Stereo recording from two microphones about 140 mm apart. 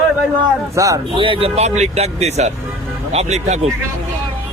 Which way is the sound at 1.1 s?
40° right (ahead or behind).